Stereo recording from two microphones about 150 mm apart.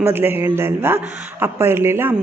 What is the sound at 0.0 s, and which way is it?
A woman's voice, 15° right (ahead or behind).